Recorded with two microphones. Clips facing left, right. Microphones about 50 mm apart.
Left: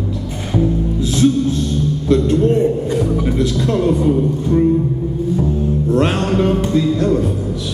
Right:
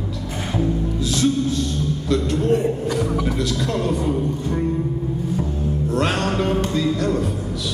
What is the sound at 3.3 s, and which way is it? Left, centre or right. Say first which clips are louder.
Music: left 6 dB; left.